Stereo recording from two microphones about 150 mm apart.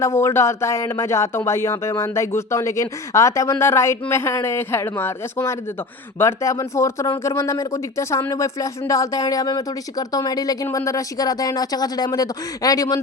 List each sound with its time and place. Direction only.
0.0 s speech: 20° left (ahead or behind)